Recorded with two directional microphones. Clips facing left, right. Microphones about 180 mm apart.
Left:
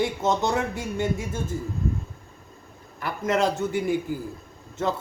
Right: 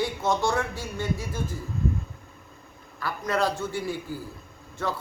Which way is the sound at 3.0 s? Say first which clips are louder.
Left 3 dB; 20° left (ahead or behind).